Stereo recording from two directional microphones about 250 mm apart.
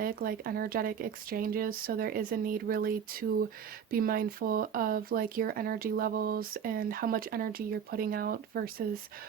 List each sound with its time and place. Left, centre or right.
0.0 s speech: right